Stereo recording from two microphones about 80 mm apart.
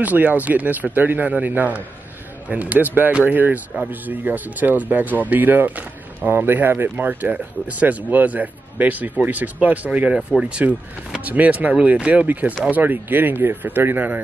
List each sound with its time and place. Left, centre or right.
0.0 s speech: right